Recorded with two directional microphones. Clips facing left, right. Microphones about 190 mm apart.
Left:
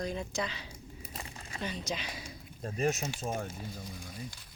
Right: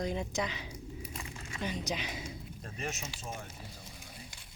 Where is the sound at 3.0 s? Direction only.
55° left (ahead or behind).